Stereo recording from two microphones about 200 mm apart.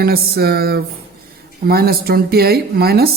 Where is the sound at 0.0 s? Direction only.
50° right (ahead or behind).